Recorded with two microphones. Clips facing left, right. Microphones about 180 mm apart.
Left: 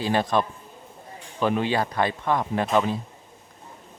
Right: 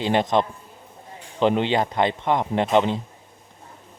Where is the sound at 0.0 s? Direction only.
20° right (ahead or behind).